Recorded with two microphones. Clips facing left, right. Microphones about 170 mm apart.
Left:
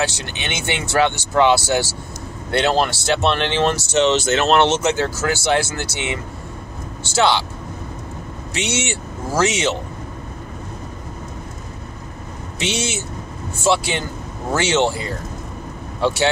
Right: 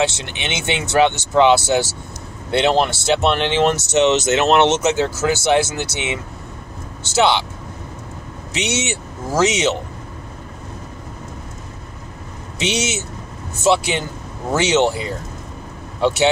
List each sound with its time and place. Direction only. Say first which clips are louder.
0.0 s speech: right 3 dB; 20° right (ahead or behind)
8.5 s speech: right 1 dB; 20° right (ahead or behind)
12.5 s speech: right 2 dB; 20° right (ahead or behind)